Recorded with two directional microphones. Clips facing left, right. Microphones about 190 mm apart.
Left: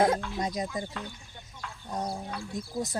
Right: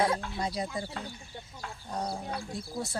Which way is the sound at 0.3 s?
20° left (ahead or behind).